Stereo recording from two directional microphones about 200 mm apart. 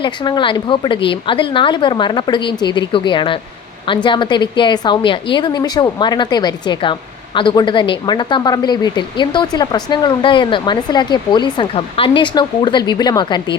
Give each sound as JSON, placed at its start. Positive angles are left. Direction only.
{"t": 0.0, "sound": "speech", "side_deg": 25}